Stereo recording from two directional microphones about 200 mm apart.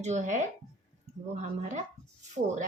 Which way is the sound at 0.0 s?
35° right (ahead or behind).